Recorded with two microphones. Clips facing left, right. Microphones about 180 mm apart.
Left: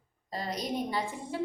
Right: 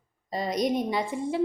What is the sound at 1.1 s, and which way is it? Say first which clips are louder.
Speech: right 10 dB; 65° right (ahead or behind).